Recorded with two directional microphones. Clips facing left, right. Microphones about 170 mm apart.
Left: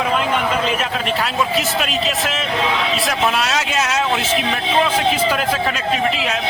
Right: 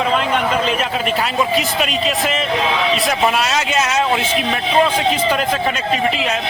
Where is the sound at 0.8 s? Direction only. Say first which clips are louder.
Right 2 dB; centre (ahead or behind).